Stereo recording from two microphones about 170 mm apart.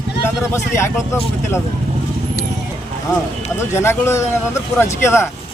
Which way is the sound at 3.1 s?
15° left (ahead or behind).